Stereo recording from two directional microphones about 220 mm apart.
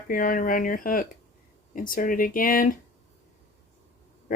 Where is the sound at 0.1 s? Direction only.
40° left (ahead or behind).